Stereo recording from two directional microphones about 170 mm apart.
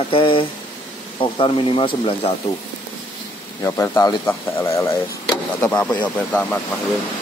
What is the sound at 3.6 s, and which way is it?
A man's voice, 15° left (ahead or behind).